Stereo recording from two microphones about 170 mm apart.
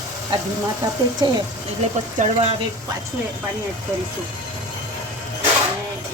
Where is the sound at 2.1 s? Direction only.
40° right (ahead or behind).